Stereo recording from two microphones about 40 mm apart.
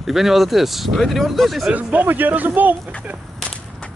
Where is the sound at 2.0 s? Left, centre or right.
Right.